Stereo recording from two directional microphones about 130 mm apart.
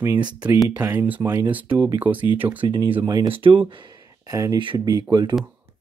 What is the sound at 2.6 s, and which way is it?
Speech, 35° right (ahead or behind).